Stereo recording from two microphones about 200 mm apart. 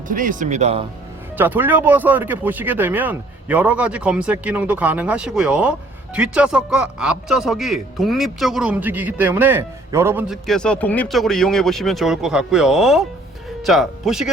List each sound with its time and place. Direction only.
0.1 s speech: 40° right (ahead or behind)
1.4 s a man's voice: 10° right (ahead or behind)
10.4 s a man's voice: 5° left (ahead or behind)